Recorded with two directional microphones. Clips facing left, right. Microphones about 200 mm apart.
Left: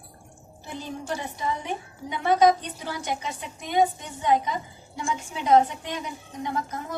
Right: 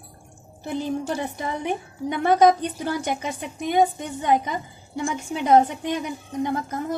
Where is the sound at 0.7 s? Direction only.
55° right (ahead or behind).